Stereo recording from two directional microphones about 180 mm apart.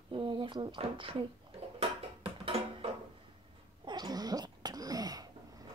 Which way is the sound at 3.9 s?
20° right (ahead or behind).